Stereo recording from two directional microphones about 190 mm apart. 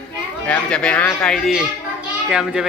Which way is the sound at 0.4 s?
5° left (ahead or behind).